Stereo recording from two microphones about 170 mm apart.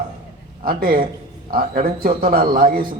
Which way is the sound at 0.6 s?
60° right (ahead or behind).